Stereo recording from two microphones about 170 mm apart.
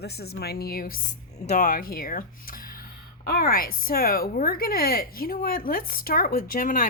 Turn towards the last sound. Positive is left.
turn(degrees=50)  # may be behind; listen again after turning